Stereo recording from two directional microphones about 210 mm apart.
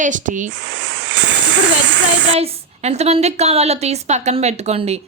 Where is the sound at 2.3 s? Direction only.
30° right (ahead or behind).